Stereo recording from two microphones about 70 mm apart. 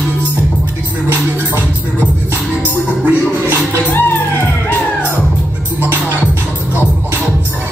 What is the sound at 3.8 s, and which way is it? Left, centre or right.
Music, left.